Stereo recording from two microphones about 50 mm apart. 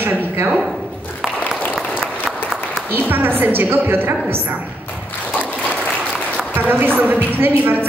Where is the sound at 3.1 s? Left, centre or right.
Right.